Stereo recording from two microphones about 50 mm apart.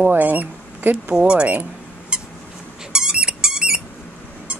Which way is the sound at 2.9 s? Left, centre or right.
Centre.